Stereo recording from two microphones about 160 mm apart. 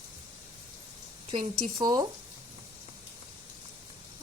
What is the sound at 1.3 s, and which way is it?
Speech, 30° right (ahead or behind).